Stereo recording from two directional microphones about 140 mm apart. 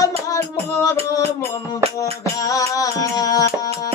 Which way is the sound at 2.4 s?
25° left (ahead or behind).